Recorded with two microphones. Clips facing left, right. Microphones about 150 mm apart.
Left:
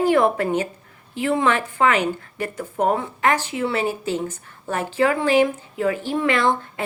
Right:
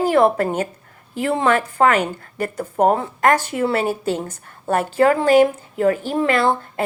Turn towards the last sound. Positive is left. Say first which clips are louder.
# right 2 dB
turn(degrees=-40)  # may be behind; listen again after turning